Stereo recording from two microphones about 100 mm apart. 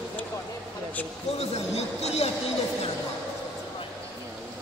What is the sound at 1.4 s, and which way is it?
Speech, 90° left.